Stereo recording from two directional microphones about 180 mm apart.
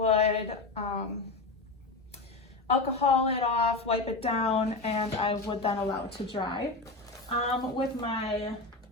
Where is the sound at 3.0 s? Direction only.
35° left (ahead or behind).